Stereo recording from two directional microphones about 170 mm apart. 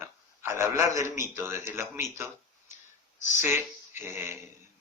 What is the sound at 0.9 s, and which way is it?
Speech, 15° right (ahead or behind).